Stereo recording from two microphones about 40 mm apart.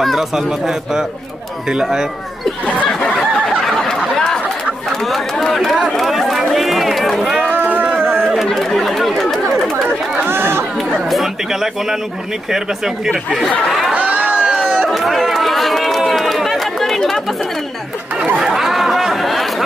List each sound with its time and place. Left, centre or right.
0.0 s speech: centre
3.2 s a sound: centre
4.8 s speech: centre
7.5 s a sound: right
8.5 s speech: centre
10.1 s chatter: right
12.4 s speech: centre
13.1 s speech: centre
13.9 s crowd: right
14.9 s run: centre
16.0 s chatter: centre
18.4 s chatter: centre